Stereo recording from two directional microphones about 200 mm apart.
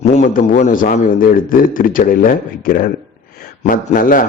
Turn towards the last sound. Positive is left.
turn(degrees=40)  # may be behind; listen again after turning